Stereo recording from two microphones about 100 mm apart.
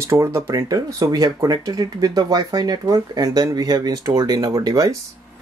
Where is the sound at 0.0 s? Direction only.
30° right (ahead or behind).